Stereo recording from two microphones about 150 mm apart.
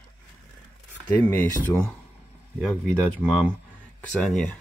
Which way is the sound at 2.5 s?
5° left (ahead or behind).